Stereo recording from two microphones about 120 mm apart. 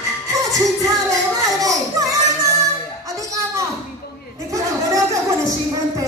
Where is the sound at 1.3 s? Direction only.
30° right (ahead or behind).